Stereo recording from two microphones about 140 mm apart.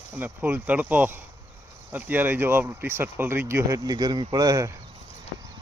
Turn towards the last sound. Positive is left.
turn(degrees=-25)  # may be behind; listen again after turning